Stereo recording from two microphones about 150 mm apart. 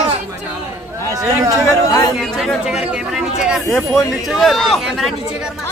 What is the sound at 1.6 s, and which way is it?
Chatter, 20° left (ahead or behind).